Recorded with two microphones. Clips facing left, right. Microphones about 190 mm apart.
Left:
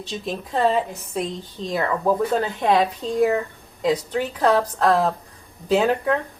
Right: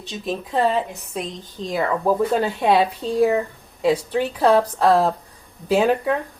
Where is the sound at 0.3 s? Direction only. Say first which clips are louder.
Right 1 dB; centre (ahead or behind).